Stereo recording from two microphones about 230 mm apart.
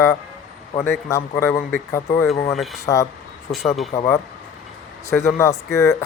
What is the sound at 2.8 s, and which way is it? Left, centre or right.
Speech, centre.